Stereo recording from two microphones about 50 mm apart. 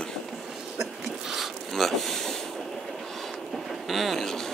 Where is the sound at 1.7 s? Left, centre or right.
Centre.